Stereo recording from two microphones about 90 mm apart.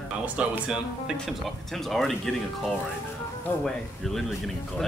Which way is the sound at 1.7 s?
5° left (ahead or behind).